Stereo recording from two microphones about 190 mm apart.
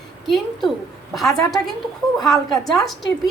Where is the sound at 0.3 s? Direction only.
Centre (ahead or behind).